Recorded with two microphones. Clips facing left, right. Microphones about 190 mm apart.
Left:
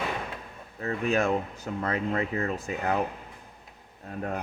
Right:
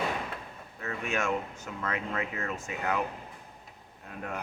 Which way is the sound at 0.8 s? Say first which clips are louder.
Left 6 dB; 35° left (ahead or behind).